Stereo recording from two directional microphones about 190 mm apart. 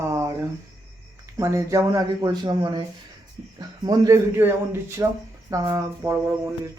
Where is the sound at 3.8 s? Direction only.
15° right (ahead or behind).